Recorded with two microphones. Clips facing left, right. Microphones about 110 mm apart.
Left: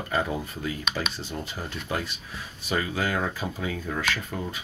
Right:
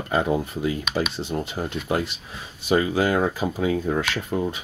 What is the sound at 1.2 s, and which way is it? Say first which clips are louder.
Speech: right 7 dB; 30° right (ahead or behind).